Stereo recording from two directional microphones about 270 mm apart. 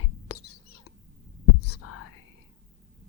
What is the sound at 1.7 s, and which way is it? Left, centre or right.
Whispering, left.